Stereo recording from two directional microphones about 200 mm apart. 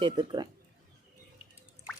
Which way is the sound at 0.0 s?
20° right (ahead or behind).